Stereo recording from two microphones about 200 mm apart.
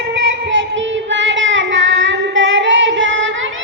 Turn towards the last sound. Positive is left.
turn(degrees=-70)  # may be behind; listen again after turning